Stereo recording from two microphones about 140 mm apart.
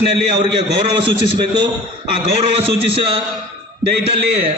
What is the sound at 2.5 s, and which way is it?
Speech, 40° right (ahead or behind).